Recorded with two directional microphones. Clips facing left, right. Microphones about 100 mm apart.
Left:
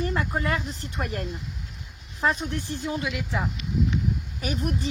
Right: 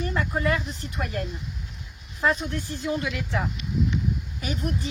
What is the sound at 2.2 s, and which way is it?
Speech, 30° left (ahead or behind).